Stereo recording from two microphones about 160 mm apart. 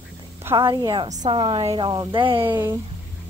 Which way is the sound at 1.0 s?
50° right (ahead or behind).